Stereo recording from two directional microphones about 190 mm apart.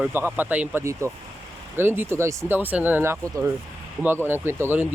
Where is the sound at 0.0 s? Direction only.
10° right (ahead or behind).